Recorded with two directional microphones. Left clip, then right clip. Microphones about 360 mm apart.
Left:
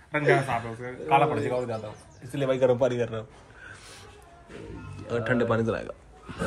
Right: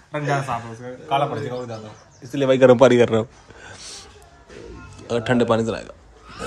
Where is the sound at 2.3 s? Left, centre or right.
Right.